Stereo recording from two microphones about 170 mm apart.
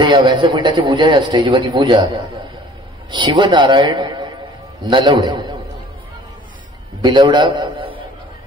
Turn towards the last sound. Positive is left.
turn(degrees=-25)  # may be behind; listen again after turning